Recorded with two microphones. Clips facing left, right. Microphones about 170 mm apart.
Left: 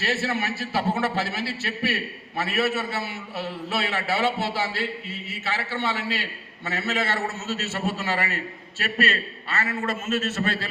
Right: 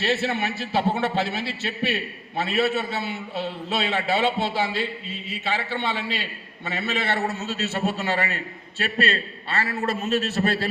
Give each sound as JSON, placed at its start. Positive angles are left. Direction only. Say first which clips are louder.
{"t": 0.0, "sound": "a man's voice", "louder": "right 2 dB", "side_deg": -20}
{"t": 9.0, "sound": "a man's voice", "louder": "even", "side_deg": -30}